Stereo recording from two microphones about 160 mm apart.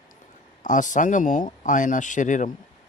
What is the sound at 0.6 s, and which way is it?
Speech, 50° left (ahead or behind).